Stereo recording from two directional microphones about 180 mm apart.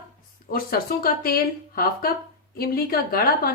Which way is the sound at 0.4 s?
55° left (ahead or behind).